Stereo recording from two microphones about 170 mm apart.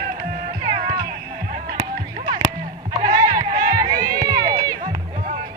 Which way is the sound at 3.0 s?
20° right (ahead or behind).